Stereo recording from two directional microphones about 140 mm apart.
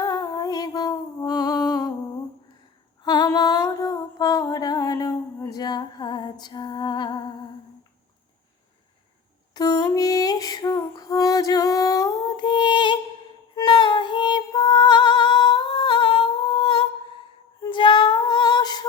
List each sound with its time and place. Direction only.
0.0 s female singing: 25° left (ahead or behind)
3.0 s music: 30° left (ahead or behind)
9.6 s music: 25° left (ahead or behind)
17.6 s female singing: 35° left (ahead or behind)